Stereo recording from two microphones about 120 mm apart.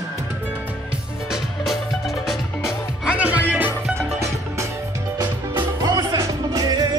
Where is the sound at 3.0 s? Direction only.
10° right (ahead or behind).